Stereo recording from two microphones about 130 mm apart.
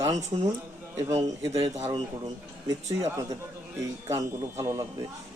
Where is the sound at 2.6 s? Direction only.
25° right (ahead or behind).